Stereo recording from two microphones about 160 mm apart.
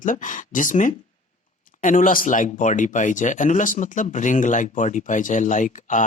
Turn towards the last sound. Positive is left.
turn(degrees=55)  # may be behind; listen again after turning